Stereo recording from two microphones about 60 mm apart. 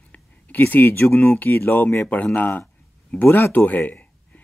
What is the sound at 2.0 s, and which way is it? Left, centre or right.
Speech, left.